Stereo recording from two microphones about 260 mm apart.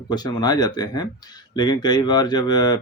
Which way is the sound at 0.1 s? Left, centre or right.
Centre.